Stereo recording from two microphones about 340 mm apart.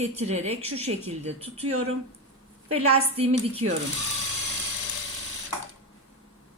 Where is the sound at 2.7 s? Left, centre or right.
Centre.